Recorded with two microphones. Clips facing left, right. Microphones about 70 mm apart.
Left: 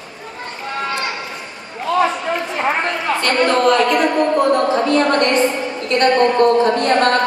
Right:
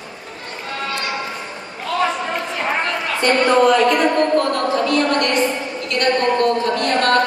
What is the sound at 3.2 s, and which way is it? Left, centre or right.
A woman's voice, centre.